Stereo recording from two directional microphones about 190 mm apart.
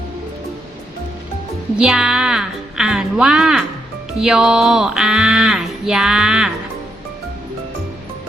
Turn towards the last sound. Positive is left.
turn(degrees=-5)  # may be behind; listen again after turning